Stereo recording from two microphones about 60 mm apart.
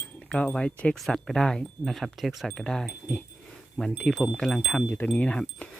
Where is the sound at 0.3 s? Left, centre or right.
Centre.